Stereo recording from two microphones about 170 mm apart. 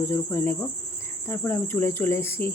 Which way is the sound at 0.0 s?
15° left (ahead or behind).